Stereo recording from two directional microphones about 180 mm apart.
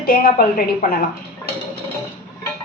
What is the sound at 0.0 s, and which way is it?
Speech, 55° left (ahead or behind).